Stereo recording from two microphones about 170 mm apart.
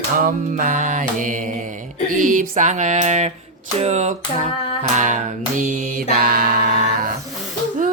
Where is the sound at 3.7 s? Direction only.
40° right (ahead or behind).